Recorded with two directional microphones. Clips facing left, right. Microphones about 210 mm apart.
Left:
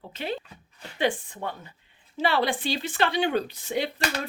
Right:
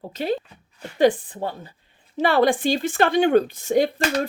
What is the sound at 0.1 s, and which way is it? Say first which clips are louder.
A woman's voice: right 7 dB; 40° right (ahead or behind).